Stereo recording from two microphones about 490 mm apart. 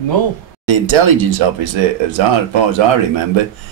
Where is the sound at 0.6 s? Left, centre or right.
Right.